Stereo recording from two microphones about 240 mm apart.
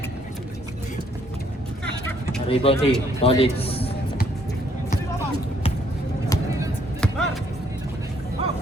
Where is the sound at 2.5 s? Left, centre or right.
Left.